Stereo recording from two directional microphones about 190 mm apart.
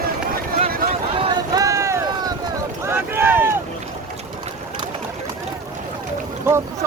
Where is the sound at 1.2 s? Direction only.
20° right (ahead or behind).